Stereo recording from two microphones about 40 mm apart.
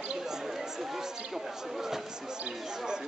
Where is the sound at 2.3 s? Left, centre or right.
Centre.